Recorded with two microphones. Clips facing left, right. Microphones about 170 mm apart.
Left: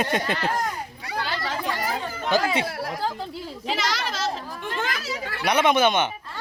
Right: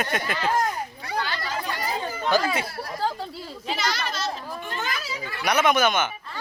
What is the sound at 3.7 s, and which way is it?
Children playing, 90° left.